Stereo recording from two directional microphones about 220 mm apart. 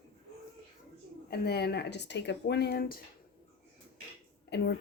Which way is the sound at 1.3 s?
45° left (ahead or behind).